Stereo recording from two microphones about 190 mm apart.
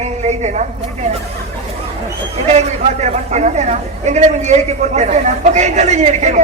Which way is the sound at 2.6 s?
35° right (ahead or behind).